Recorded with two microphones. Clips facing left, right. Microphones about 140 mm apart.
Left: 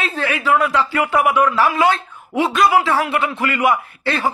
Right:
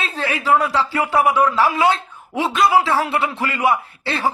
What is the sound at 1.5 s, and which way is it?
A man's voice, 20° right (ahead or behind).